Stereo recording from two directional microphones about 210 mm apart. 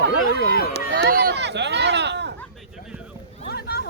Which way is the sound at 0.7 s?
50° right (ahead or behind).